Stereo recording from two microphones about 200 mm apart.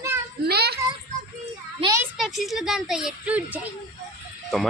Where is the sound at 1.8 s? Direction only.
15° right (ahead or behind).